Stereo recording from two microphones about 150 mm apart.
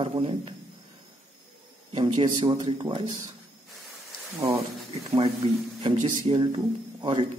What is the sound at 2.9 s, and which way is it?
Speech, 50° right (ahead or behind).